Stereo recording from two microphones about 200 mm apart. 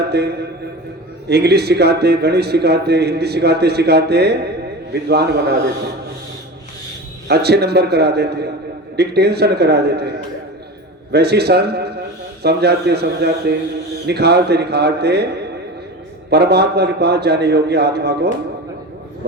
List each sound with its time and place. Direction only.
0.1 s a man's voice: 55° right (ahead or behind)
7.3 s a man's voice: 55° right (ahead or behind)
11.1 s a man's voice: 55° right (ahead or behind)
16.3 s a man's voice: 55° right (ahead or behind)